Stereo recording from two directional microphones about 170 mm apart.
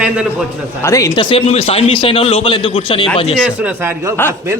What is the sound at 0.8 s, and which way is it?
A man's voice, 20° left (ahead or behind).